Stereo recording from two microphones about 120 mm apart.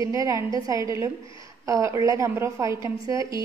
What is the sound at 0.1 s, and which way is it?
A woman's voice, 25° right (ahead or behind).